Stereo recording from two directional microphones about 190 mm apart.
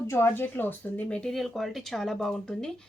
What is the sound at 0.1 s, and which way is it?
Speech, 10° left (ahead or behind).